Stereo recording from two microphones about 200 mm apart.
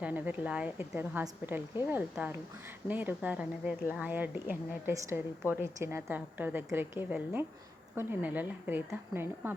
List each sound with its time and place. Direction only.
0.0 s a woman's voice: 5° right (ahead or behind)